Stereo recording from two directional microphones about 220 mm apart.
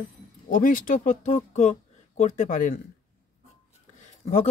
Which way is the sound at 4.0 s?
30° left (ahead or behind).